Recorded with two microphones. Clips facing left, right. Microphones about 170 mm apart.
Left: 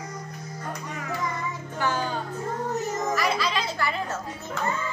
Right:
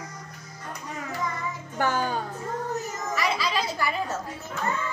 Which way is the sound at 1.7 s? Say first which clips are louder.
Right 2 dB; 50° right (ahead or behind).